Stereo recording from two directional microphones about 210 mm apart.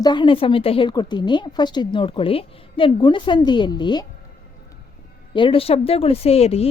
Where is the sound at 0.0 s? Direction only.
20° left (ahead or behind).